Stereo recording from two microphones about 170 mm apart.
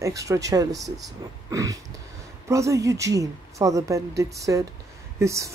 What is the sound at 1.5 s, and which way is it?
Speech, 20° right (ahead or behind).